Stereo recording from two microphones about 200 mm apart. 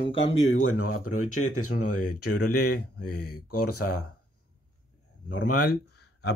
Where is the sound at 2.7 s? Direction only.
50° left (ahead or behind).